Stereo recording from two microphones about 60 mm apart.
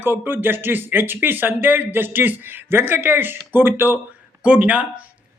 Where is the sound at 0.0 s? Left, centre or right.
Right.